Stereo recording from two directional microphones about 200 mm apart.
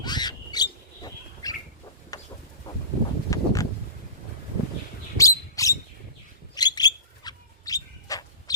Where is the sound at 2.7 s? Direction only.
20° left (ahead or behind).